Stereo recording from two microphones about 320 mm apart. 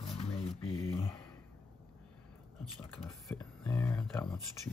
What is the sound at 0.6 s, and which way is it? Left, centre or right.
Speech, centre.